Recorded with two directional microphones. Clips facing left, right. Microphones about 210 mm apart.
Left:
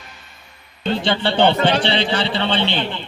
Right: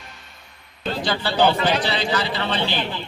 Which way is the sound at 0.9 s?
25° left (ahead or behind).